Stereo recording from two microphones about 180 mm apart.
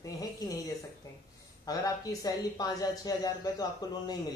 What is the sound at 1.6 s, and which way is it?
Speech, 20° left (ahead or behind).